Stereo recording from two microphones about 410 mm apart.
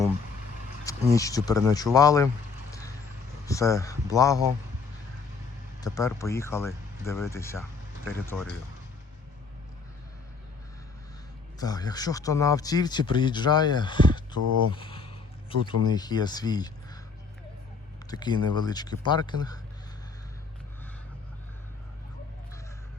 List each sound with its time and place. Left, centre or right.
0.9 s speech: centre
3.4 s speech: centre
5.8 s speech: centre
11.6 s speech: centre
18.1 s speech: centre